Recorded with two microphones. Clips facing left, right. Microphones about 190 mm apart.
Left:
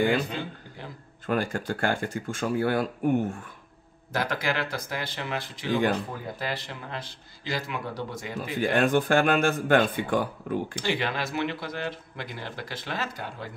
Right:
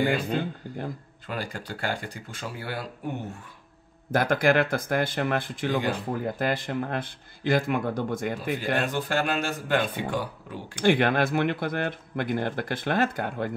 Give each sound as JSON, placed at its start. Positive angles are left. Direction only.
{"t": 0.0, "sound": "speech", "side_deg": -50}
{"t": 1.2, "sound": "speech", "side_deg": 50}
{"t": 4.1, "sound": "speech", "side_deg": -50}
{"t": 8.5, "sound": "speech", "side_deg": 50}
{"t": 10.8, "sound": "speech", "side_deg": -55}